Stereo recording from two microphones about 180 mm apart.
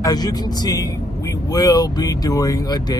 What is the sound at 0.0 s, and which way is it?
Speech, 20° left (ahead or behind).